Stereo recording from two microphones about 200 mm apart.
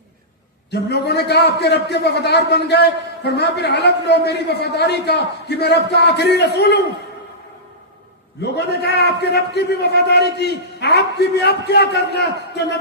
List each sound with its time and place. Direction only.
0.7 s a man's voice: 55° left (ahead or behind)
8.4 s a man's voice: 55° left (ahead or behind)